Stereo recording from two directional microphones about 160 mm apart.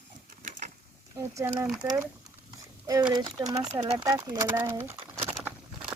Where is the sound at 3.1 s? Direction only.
25° right (ahead or behind).